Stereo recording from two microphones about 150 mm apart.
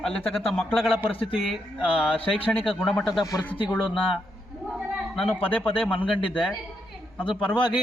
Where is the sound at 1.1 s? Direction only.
35° left (ahead or behind).